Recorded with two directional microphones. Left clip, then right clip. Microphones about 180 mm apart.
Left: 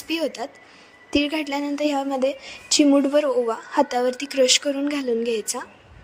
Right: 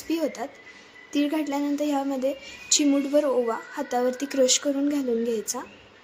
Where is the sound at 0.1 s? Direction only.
50° left (ahead or behind).